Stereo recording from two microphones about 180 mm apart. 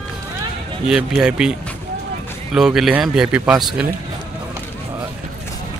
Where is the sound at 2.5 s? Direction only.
Centre (ahead or behind).